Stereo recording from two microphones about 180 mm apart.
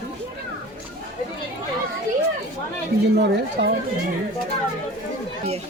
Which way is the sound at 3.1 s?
70° right (ahead or behind).